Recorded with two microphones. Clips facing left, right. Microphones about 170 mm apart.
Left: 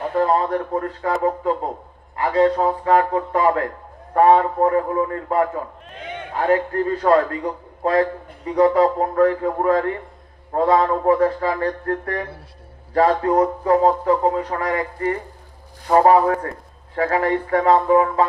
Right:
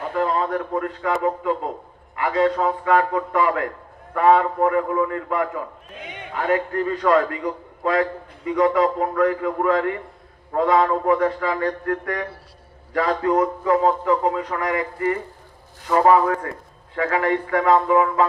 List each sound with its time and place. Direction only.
0.2 s speech: 35° left (ahead or behind)